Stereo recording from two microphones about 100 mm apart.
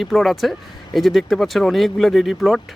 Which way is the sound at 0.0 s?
Centre (ahead or behind).